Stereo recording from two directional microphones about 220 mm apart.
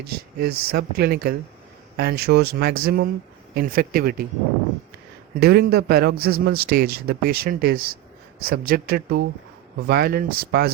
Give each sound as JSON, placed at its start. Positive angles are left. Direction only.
{"t": 0.0, "sound": "a man's voice", "side_deg": -45}
{"t": 5.3, "sound": "a man's voice", "side_deg": -45}